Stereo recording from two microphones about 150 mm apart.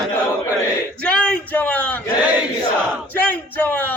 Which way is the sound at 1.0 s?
5° left (ahead or behind).